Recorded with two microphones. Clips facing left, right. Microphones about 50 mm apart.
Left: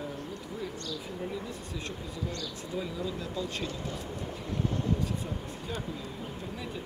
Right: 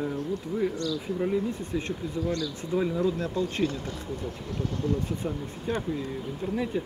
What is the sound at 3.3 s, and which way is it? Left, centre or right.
Speech, right.